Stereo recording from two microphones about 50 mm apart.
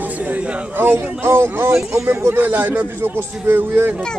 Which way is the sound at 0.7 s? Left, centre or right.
Right.